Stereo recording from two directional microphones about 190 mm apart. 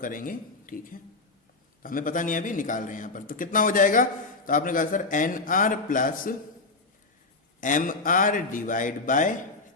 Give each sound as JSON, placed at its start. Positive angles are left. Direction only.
{"t": 0.0, "sound": "a man's voice", "side_deg": 45}
{"t": 7.6, "sound": "a man's voice", "side_deg": 45}